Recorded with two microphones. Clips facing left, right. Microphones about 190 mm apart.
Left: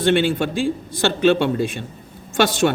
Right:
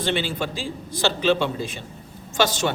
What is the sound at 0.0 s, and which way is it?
Speech, 55° left (ahead or behind).